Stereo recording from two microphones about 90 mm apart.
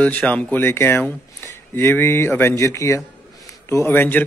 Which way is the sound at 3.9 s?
20° left (ahead or behind).